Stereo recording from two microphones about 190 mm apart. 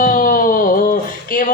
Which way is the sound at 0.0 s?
45° left (ahead or behind).